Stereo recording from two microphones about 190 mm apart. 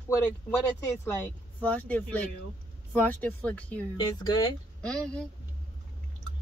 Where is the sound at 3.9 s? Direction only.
20° left (ahead or behind).